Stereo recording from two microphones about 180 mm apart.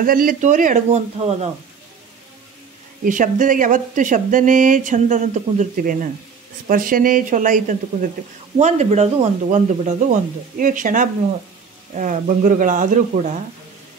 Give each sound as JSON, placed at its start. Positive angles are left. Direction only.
{"t": 0.0, "sound": "speech", "side_deg": -50}
{"t": 3.1, "sound": "speech", "side_deg": -45}